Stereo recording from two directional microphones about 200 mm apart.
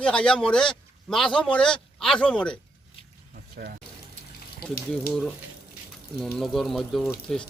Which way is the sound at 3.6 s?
50° right (ahead or behind).